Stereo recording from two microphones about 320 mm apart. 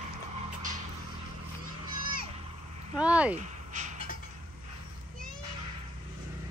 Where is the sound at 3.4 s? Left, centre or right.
Right.